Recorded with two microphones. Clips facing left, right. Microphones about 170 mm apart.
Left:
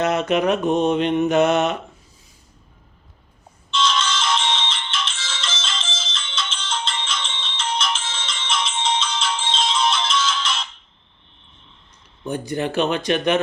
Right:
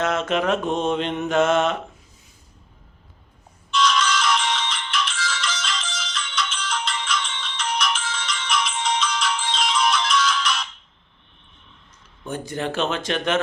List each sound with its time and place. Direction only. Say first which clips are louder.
0.0 s mantra: left 3 dB; centre (ahead or behind)
0.7 s a sound: left 4 dB; 15° left (ahead or behind)
1.0 s mantra: left 3 dB; centre (ahead or behind)
3.7 s music: right 1 dB; 25° left (ahead or behind)
12.3 s mantra: left 4 dB; centre (ahead or behind)
12.6 s a sound: left 3 dB; 15° left (ahead or behind)